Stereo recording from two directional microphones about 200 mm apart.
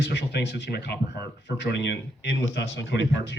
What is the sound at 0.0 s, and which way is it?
Speech, 60° left (ahead or behind).